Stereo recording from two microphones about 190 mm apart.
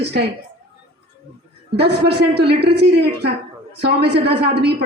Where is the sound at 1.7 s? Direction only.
60° right (ahead or behind).